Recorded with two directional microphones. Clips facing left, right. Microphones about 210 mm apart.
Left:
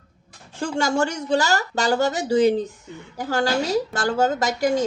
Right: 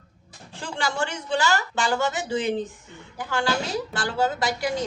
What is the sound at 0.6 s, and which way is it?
A woman's voice, 45° left (ahead or behind).